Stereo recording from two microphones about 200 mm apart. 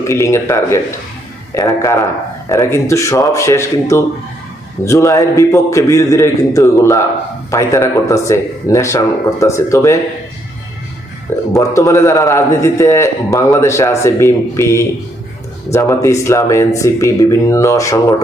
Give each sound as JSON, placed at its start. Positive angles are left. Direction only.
{"t": 0.1, "sound": "a man's voice", "side_deg": 15}
{"t": 11.5, "sound": "a man's voice", "side_deg": 15}